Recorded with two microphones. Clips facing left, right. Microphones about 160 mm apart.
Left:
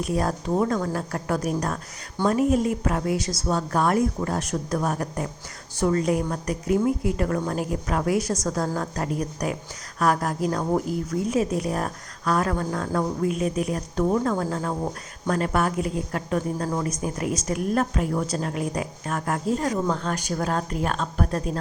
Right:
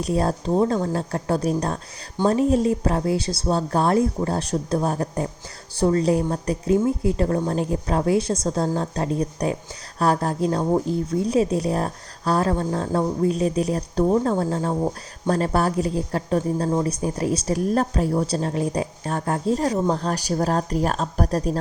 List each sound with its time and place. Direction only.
0.0 s a woman's voice: 30° right (ahead or behind)